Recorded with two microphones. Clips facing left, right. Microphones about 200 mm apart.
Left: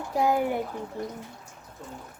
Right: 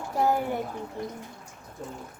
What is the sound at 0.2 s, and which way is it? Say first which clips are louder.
Speech: left 1 dB; 15° left (ahead or behind).